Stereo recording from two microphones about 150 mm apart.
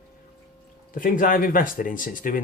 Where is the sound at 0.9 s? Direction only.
65° left (ahead or behind).